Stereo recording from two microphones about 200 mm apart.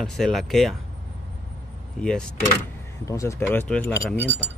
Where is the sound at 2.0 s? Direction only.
5° left (ahead or behind).